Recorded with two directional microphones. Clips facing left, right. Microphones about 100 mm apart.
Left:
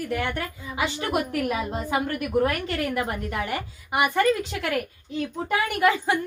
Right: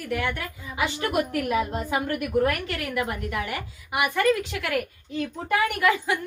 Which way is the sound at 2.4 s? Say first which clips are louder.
Left 1 dB; 30° left (ahead or behind).